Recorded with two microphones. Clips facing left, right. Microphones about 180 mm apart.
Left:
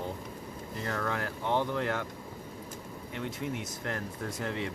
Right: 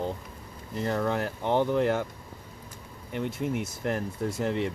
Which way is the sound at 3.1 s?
30° right (ahead or behind).